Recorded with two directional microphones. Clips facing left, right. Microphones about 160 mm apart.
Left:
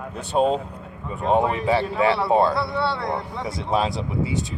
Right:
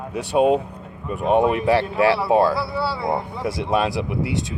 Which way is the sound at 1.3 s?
75° right (ahead or behind).